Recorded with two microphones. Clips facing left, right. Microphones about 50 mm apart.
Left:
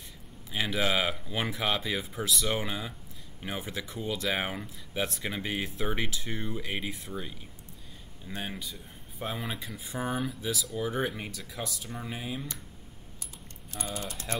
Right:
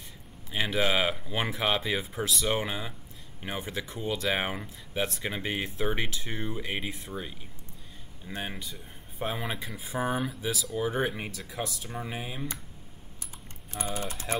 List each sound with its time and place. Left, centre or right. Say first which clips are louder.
0.5 s speech: right 2 dB; centre
13.7 s typing: right 3 dB; right